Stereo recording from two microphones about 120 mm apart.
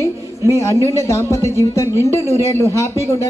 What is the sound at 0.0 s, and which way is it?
A man's voice, 25° left (ahead or behind).